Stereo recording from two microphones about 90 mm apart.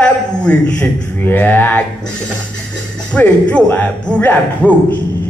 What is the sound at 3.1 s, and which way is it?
A man's voice, 15° left (ahead or behind).